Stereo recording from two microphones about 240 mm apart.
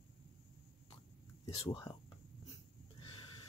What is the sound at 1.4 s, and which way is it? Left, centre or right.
Speech, left.